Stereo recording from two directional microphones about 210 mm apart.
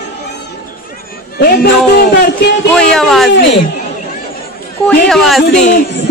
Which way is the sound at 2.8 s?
5° left (ahead or behind).